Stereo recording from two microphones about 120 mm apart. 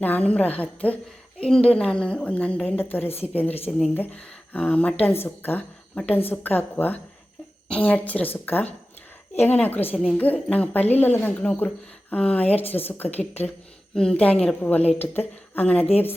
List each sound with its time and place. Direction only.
0.0 s speech: 10° left (ahead or behind)
3.7 s speech: centre (ahead or behind)
3.9 s speech: 10° left (ahead or behind)
13.9 s speech: 5° left (ahead or behind)
14.8 s speech: 60° left (ahead or behind)
15.0 s a woman's voice: 15° left (ahead or behind)